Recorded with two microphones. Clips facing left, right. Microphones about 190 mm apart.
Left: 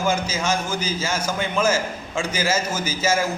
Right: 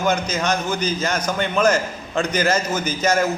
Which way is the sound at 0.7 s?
60° right (ahead or behind).